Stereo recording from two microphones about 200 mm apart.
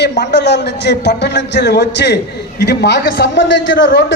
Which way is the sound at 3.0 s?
45° left (ahead or behind).